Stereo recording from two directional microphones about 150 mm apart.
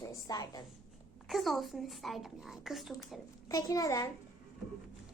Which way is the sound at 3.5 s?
25° left (ahead or behind).